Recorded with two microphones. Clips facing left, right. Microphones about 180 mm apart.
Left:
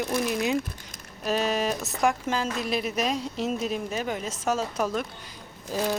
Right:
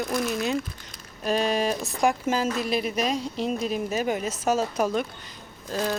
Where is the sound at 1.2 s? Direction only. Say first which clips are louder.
Right 2 dB; 5° left (ahead or behind).